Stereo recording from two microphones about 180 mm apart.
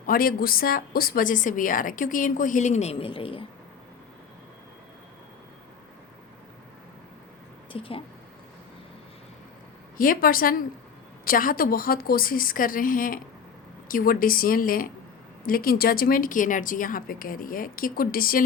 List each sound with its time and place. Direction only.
0.0 s a woman's voice: 55° left (ahead or behind); by 3.4 s 30° left (ahead or behind)
7.7 s speech: 30° left (ahead or behind)
10.0 s a woman's voice: 50° left (ahead or behind)